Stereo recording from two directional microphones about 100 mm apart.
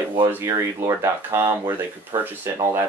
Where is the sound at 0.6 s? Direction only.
30° right (ahead or behind).